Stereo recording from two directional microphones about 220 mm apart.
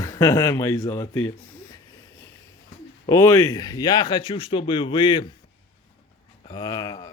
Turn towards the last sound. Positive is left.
turn(degrees=15)  # may be behind; listen again after turning